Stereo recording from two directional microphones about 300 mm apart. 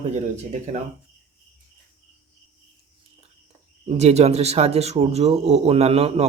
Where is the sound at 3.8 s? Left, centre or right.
Right.